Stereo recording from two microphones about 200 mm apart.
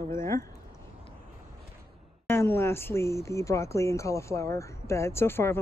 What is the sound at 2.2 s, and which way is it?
Speech, 10° left (ahead or behind).